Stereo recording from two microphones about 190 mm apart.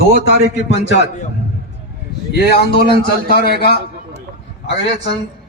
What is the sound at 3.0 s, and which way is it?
Speech, 55° left (ahead or behind).